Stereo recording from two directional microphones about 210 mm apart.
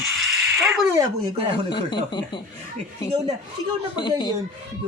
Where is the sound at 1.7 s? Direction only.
20° left (ahead or behind).